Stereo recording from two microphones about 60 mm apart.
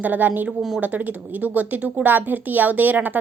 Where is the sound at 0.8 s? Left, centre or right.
Right.